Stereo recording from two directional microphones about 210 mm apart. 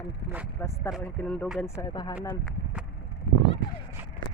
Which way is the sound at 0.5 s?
10° left (ahead or behind).